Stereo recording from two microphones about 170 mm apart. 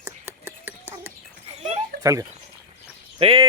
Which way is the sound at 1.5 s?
40° right (ahead or behind).